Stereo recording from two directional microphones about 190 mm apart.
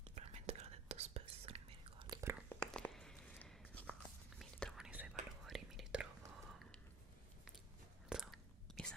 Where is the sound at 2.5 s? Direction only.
5° left (ahead or behind).